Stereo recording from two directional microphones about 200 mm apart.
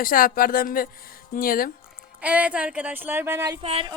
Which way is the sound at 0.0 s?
45° left (ahead or behind).